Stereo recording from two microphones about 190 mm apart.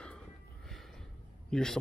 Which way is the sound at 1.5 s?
5° left (ahead or behind).